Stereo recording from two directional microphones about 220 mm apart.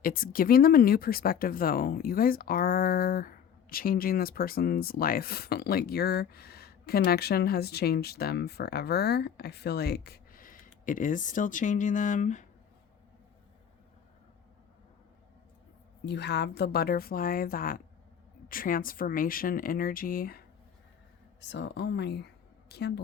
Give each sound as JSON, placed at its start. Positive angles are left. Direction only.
{"t": 0.0, "sound": "speech", "side_deg": 40}
{"t": 16.0, "sound": "speech", "side_deg": 50}
{"t": 21.4, "sound": "speech", "side_deg": 55}